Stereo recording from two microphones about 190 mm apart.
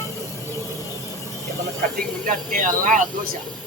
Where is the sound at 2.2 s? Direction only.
45° right (ahead or behind).